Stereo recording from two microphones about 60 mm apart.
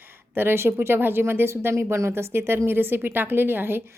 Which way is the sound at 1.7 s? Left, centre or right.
Right.